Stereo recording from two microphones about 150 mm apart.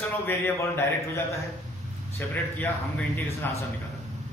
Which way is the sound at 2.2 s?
10° left (ahead or behind).